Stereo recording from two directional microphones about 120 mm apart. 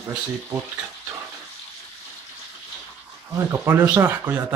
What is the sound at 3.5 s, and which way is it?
Speech, 20° right (ahead or behind).